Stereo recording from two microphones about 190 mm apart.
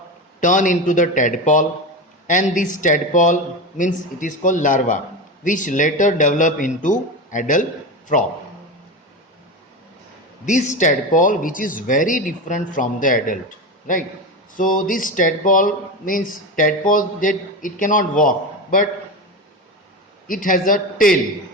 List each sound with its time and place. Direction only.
0.3 s speech: 40° left (ahead or behind)
10.4 s speech: 40° left (ahead or behind)
14.5 s speech: 45° left (ahead or behind)
20.2 s speech: 45° left (ahead or behind)